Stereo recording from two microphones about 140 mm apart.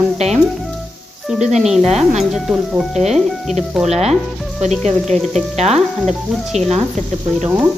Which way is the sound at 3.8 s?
50° right (ahead or behind).